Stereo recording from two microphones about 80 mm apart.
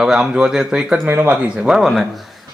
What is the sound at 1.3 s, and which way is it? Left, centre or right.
Speech, centre.